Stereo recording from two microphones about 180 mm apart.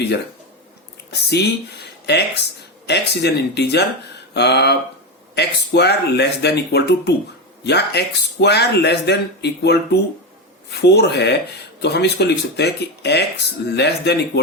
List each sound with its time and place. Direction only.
1.1 s speech: 70° left (ahead or behind)